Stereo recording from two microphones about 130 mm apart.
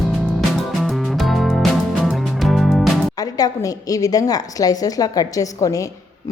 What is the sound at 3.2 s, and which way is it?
A woman's voice, 30° left (ahead or behind).